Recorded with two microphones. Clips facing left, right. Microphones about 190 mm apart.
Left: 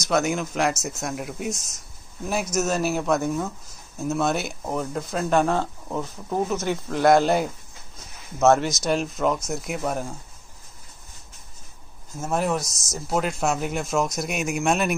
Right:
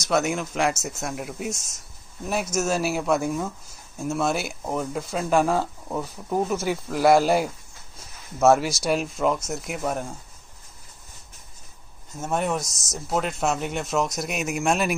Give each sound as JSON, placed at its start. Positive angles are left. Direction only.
{"t": 0.0, "sound": "speech", "side_deg": -5}
{"t": 12.2, "sound": "speech", "side_deg": 0}